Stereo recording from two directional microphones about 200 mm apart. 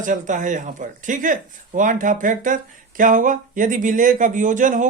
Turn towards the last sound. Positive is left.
turn(degrees=-40)  # may be behind; listen again after turning